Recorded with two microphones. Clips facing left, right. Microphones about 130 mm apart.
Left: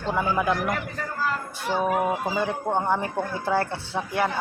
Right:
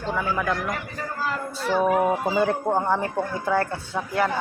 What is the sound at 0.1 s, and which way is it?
Speech, 15° left (ahead or behind).